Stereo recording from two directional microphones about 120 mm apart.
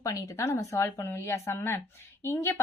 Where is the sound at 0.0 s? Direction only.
25° left (ahead or behind).